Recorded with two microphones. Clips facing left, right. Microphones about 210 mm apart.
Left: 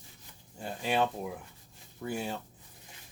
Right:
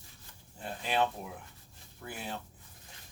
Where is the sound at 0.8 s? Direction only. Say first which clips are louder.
Left 2 dB; 25° left (ahead or behind).